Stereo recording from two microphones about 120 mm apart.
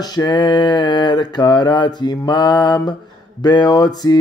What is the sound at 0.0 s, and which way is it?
Mantra, 35° left (ahead or behind).